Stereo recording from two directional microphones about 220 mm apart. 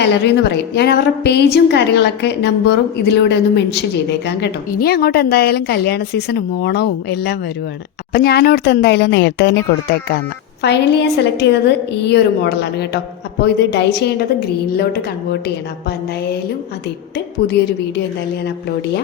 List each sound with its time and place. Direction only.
0.0 s a woman's voice: 50° left (ahead or behind)